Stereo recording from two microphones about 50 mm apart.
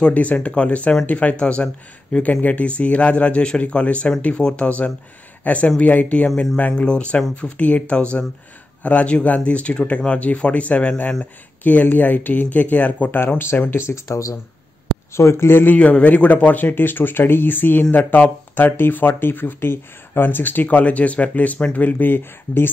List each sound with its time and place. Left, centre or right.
0.0 s speech: left
13.2 s speech: left
13.8 s speech: left
15.1 s a man's voice: left
15.7 s speech: left